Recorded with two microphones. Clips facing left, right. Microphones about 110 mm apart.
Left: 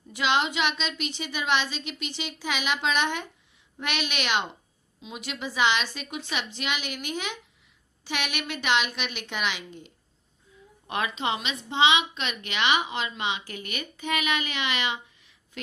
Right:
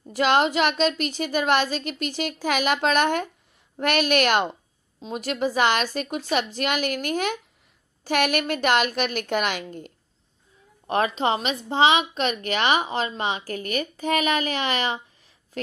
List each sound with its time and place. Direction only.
0.1 s a woman's voice: 45° right (ahead or behind)